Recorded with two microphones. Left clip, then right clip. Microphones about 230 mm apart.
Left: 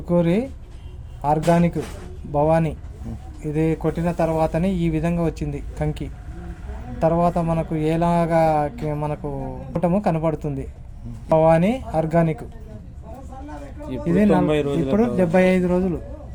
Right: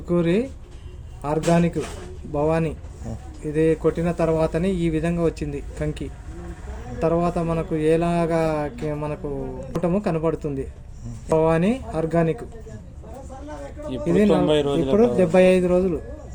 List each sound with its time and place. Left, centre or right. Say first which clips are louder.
0.1 s a man's voice: left 1 dB; left
14.0 s a man's voice: even; left
14.4 s a man's voice: right 1 dB; centre
14.9 s a man's voice: right 2 dB; left